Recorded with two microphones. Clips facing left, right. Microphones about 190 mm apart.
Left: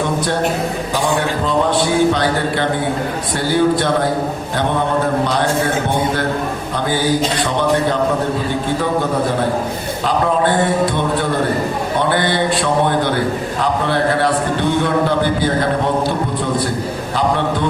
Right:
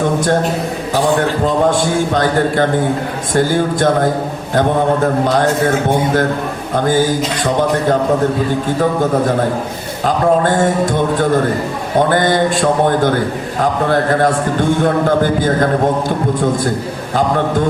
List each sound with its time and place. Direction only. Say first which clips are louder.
1.5 s a man's voice: right 1 dB; 45° right (ahead or behind)
5.2 s a man's voice: right 4 dB; 45° right (ahead or behind)
6.7 s a man's voice: right 4 dB; 45° right (ahead or behind)
10.1 s a man's voice: right 3 dB; 45° right (ahead or behind)
17.2 s a man's voice: right 3 dB; 45° right (ahead or behind)